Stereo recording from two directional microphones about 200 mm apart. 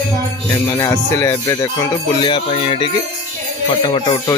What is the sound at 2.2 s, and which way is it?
Music, 25° left (ahead or behind).